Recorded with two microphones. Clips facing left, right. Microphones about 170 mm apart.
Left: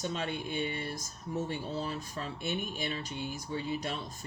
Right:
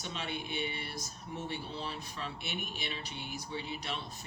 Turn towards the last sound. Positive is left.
turn(degrees=45)  # may be behind; listen again after turning